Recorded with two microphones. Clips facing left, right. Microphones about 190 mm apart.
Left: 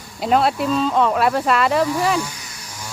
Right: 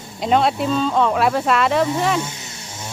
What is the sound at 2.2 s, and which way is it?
Wild animals, 25° right (ahead or behind).